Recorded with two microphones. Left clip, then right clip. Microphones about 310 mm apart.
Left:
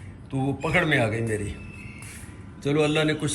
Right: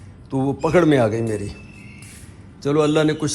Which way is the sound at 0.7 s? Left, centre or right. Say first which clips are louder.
Right 6 dB; centre.